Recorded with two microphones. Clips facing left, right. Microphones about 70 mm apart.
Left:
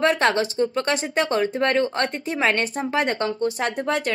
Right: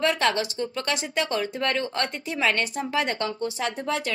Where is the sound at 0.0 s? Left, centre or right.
Left.